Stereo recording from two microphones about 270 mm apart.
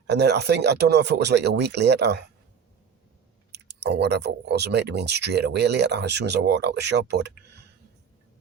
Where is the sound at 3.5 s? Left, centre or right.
Right.